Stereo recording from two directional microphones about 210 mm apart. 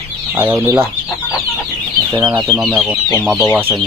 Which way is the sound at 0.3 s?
10° right (ahead or behind).